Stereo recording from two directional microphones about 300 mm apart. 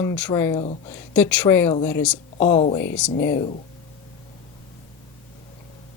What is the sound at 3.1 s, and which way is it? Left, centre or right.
Speech, left.